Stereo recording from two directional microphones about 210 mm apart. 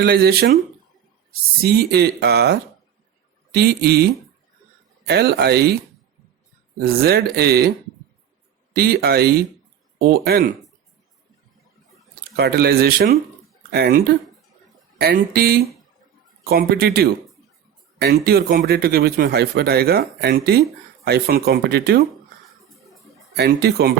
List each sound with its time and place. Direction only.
0.0 s a man's voice: 50° right (ahead or behind)
6.7 s a man's voice: 45° right (ahead or behind)
8.7 s a man's voice: 50° right (ahead or behind)
12.4 s a man's voice: 50° right (ahead or behind)
23.4 s a man's voice: 50° right (ahead or behind)